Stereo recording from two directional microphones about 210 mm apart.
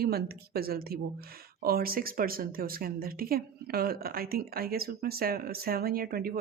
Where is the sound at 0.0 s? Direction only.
45° right (ahead or behind).